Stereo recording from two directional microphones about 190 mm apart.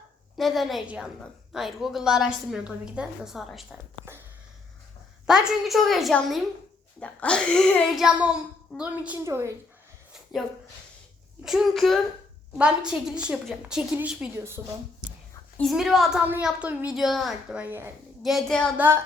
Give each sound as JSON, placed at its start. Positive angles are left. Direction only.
{"t": 0.3, "sound": "a woman's voice", "side_deg": 0}
{"t": 5.2, "sound": "a woman's voice", "side_deg": -5}
{"t": 9.2, "sound": "a woman's voice", "side_deg": -15}
{"t": 11.4, "sound": "a woman's voice", "side_deg": 0}
{"t": 15.5, "sound": "a woman's voice", "side_deg": 0}